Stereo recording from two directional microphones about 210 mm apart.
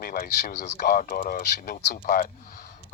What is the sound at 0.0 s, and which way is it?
Speech, 45° left (ahead or behind).